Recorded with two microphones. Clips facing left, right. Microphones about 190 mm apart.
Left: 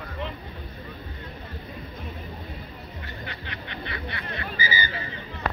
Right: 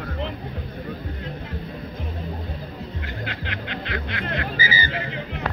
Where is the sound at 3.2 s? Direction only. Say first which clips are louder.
Right 7 dB; 90° right.